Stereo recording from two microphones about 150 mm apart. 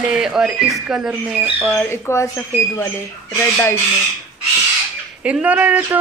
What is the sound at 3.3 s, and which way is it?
Speech, 15° left (ahead or behind).